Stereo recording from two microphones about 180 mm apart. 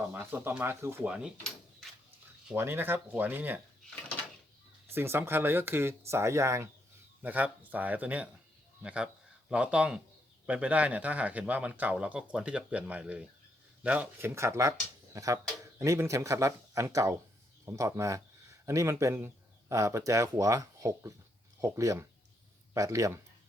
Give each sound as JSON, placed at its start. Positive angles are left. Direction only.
{"t": 0.1, "sound": "speech", "side_deg": -10}
{"t": 2.5, "sound": "speech", "side_deg": -10}
{"t": 4.9, "sound": "a man's voice", "side_deg": -15}